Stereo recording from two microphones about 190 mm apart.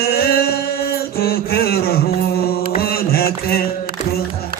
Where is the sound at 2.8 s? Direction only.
55° left (ahead or behind).